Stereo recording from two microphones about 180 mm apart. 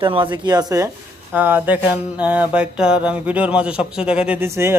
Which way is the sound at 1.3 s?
10° right (ahead or behind).